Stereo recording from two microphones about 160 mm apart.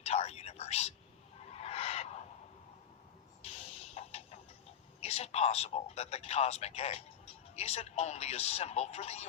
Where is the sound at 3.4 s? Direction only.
40° left (ahead or behind).